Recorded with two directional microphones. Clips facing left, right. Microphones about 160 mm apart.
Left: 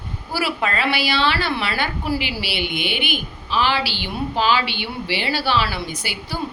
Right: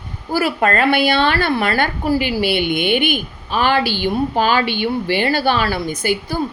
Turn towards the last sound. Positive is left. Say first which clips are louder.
# right 10 dB
turn(degrees=-50)  # may be behind; listen again after turning